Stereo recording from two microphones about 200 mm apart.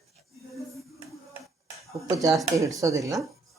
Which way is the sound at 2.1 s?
15° right (ahead or behind).